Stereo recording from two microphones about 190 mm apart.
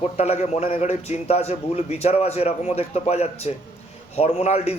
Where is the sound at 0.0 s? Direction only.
35° left (ahead or behind).